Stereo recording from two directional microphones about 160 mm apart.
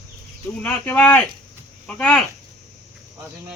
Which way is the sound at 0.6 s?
10° left (ahead or behind).